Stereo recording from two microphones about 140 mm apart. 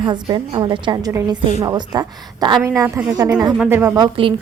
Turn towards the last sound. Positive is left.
turn(degrees=-35)  # may be behind; listen again after turning